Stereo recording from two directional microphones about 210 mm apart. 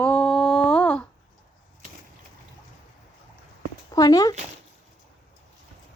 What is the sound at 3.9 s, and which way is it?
Speech, 15° left (ahead or behind).